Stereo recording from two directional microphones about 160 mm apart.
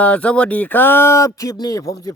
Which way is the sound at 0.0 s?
5° left (ahead or behind).